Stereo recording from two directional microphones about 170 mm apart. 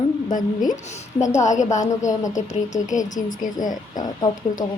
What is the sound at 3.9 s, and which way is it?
Speech, 20° left (ahead or behind).